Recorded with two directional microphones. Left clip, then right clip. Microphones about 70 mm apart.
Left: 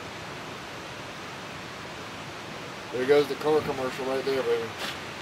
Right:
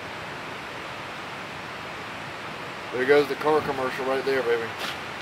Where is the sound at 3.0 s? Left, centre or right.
Right.